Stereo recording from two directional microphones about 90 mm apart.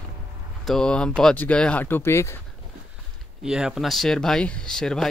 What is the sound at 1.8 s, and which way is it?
Speech, 25° left (ahead or behind).